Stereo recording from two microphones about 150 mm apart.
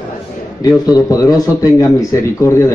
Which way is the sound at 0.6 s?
25° left (ahead or behind).